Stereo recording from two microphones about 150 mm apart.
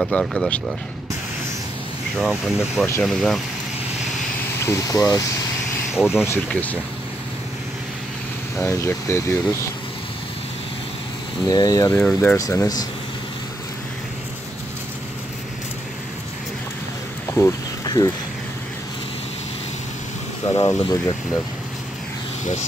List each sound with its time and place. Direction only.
0.0 s speech: centre (ahead or behind)
2.1 s speech: centre (ahead or behind)
4.6 s speech: 20° left (ahead or behind)
5.9 s speech: 5° right (ahead or behind)
6.2 s speech: 15° left (ahead or behind)
8.5 s speech: 15° left (ahead or behind)
11.4 s speech: 25° left (ahead or behind)
11.9 s speech: centre (ahead or behind)
12.4 s speech: 20° left (ahead or behind)
17.3 s a sound: 20° left (ahead or behind)
20.5 s speech: 25° left (ahead or behind)
22.4 s speech: 50° left (ahead or behind)